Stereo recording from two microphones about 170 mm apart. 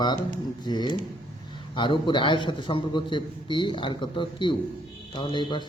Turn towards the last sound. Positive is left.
turn(degrees=25)  # may be behind; listen again after turning